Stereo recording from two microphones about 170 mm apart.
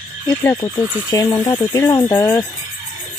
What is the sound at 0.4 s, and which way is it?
Speech, 15° left (ahead or behind).